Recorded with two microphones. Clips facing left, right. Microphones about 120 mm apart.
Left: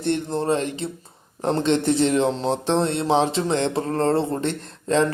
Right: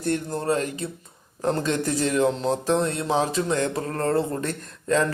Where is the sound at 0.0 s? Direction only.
25° left (ahead or behind).